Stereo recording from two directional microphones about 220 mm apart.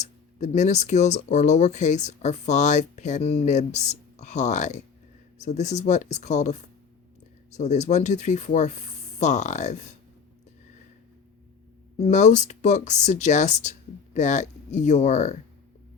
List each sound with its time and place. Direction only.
0.0 s speech: 30° left (ahead or behind)
11.9 s speech: 30° left (ahead or behind)